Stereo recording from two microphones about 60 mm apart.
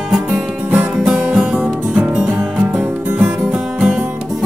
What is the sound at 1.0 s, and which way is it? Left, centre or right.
Music, centre.